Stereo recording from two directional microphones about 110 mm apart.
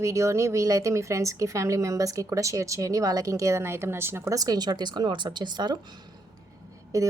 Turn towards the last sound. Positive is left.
turn(degrees=-30)  # may be behind; listen again after turning